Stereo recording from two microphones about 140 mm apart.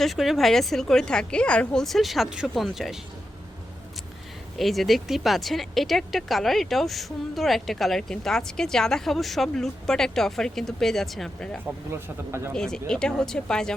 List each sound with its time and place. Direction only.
0.0 s speech: centre (ahead or behind)
4.5 s speech: centre (ahead or behind)
11.9 s speech: 15° right (ahead or behind)
12.5 s speech: 5° left (ahead or behind)